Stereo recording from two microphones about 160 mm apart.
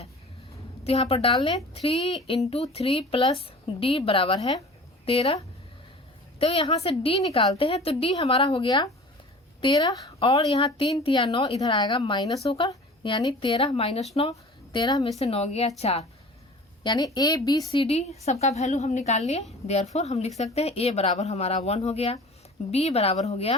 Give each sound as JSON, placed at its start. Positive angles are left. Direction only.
{"t": 0.9, "sound": "a woman's voice", "side_deg": 35}
{"t": 6.4, "sound": "a woman's voice", "side_deg": 35}
{"t": 12.4, "sound": "a woman's voice", "side_deg": 40}
{"t": 15.2, "sound": "a woman's voice", "side_deg": 40}
{"t": 16.8, "sound": "a woman's voice", "side_deg": 25}
{"t": 17.7, "sound": "a woman's voice", "side_deg": 35}